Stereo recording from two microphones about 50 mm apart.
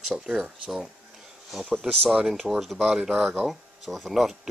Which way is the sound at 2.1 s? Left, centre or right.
Centre.